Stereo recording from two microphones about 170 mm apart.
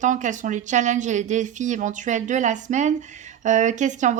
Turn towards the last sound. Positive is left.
turn(degrees=-45)  # may be behind; listen again after turning